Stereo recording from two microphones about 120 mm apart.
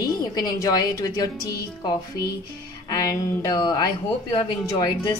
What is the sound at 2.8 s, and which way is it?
A woman's voice, 30° left (ahead or behind).